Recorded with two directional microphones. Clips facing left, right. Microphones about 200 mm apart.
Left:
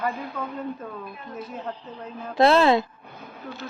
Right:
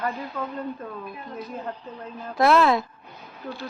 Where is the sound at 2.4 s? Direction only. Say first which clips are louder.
Left 2 dB; 30° left (ahead or behind).